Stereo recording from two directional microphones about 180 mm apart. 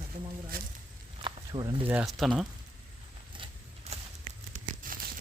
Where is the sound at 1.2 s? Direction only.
25° right (ahead or behind).